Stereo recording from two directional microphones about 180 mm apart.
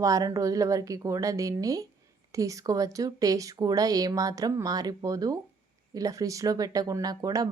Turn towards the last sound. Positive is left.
turn(degrees=-20)  # may be behind; listen again after turning